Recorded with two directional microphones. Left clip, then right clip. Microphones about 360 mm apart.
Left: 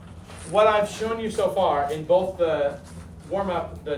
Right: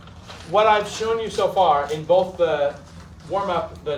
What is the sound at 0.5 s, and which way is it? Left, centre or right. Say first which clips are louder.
Speech: right 2 dB; right.